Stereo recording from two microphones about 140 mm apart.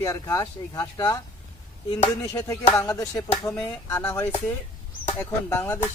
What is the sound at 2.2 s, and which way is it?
Speech, 25° left (ahead or behind).